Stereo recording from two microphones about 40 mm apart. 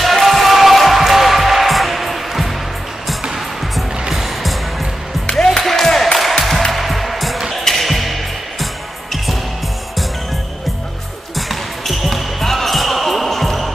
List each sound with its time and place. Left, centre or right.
0.0 s basketball bounce: centre
3.3 s music: centre
11.3 s basketball bounce: centre